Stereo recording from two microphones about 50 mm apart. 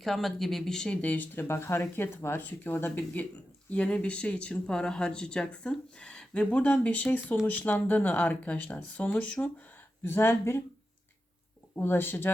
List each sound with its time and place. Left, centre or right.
0.0 s speech: centre
1.0 s speech: left
1.4 s speech: left
2.5 s speech: left
9.4 s speech: left
10.2 s speech: left
11.7 s speech: left